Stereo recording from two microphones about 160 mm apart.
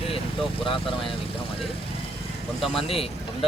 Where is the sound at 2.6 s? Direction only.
Centre (ahead or behind).